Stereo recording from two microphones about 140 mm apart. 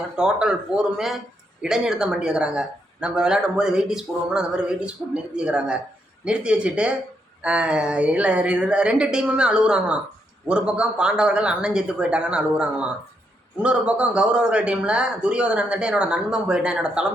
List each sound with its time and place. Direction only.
0.2 s a man's voice: 5° right (ahead or behind)